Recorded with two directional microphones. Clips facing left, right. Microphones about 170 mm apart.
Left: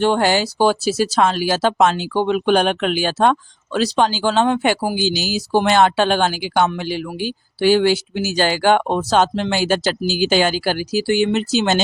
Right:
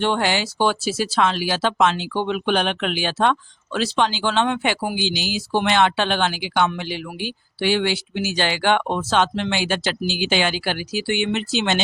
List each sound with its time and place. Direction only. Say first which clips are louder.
0.0 s speech: left 5 dB; 40° left (ahead or behind)